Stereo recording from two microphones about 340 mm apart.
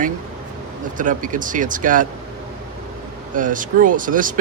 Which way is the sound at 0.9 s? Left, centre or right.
Right.